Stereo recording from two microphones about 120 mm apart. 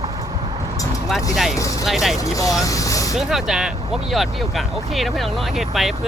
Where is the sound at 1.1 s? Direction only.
Centre (ahead or behind).